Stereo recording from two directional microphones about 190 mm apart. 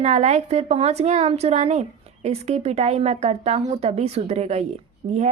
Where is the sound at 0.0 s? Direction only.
35° right (ahead or behind).